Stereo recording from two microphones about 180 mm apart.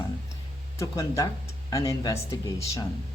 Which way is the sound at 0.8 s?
20° left (ahead or behind).